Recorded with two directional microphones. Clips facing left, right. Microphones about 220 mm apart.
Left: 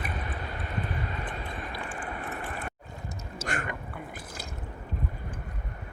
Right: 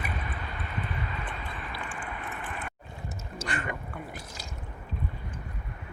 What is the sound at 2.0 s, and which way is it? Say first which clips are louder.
Vehicle: left 3 dB; 40° left (ahead or behind).